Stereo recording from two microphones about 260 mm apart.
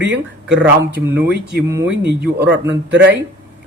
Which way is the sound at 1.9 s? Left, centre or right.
Right.